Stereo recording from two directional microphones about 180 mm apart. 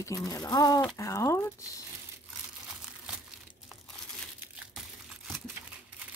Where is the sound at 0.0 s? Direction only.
20° left (ahead or behind).